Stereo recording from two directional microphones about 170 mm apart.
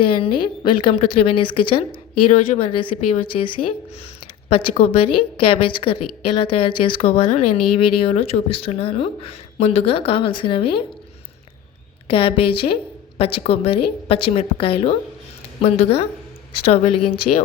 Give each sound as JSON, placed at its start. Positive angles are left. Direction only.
{"t": 0.1, "sound": "a woman's voice", "side_deg": 30}
{"t": 12.0, "sound": "speech", "side_deg": 30}